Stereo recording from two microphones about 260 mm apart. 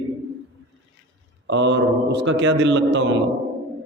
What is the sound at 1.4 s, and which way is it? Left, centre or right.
A man's voice, right.